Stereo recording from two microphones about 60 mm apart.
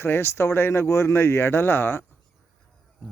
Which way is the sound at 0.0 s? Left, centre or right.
Left.